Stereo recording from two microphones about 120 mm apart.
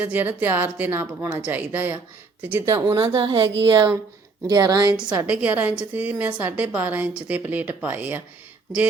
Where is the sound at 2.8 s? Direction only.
45° right (ahead or behind).